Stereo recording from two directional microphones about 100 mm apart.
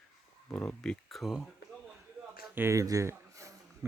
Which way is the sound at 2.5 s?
25° right (ahead or behind).